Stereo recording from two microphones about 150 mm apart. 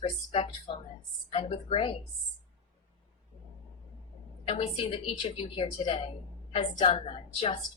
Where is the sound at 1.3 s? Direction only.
40° left (ahead or behind).